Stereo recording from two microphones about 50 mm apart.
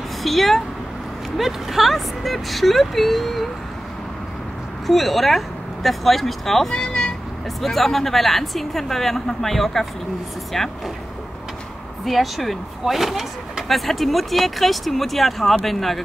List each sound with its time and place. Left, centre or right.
0.2 s speech: centre
4.8 s speech: centre
6.7 s vehicle: centre
7.6 s speech: centre
12.0 s speech: centre